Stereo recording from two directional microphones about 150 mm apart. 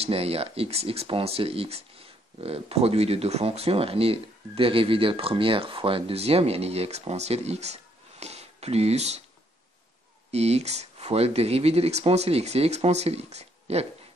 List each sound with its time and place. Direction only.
0.0 s speech: 40° right (ahead or behind)
10.3 s speech: 45° right (ahead or behind)